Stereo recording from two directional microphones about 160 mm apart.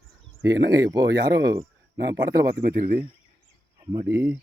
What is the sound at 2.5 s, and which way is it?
Speech, 65° right (ahead or behind).